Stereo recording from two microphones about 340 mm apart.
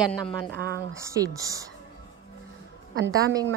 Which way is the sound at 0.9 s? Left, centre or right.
Centre.